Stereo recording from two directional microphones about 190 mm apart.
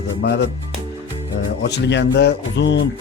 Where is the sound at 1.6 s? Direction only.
65° left (ahead or behind).